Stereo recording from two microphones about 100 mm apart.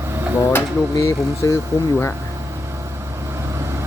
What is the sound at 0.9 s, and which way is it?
Speech, 35° left (ahead or behind).